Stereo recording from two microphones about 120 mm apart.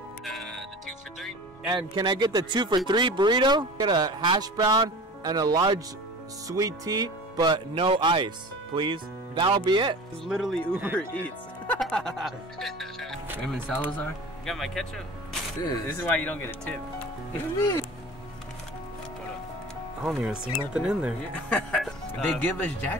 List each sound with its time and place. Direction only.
0.2 s music: centre (ahead or behind)
1.7 s speech: 40° right (ahead or behind)
10.2 s speech: centre (ahead or behind)
10.7 s speech: 15° right (ahead or behind)
11.0 s speech: 10° left (ahead or behind)
16.0 s speech: 15° left (ahead or behind)
17.6 s speech: 30° left (ahead or behind)
20.0 s speech: 5° right (ahead or behind)
21.5 s speech: 10° left (ahead or behind)